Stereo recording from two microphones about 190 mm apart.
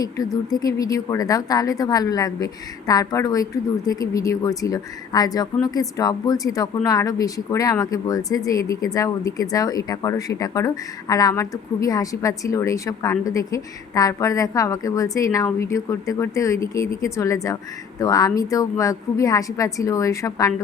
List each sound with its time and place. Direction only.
0.0 s a woman's voice: 20° left (ahead or behind)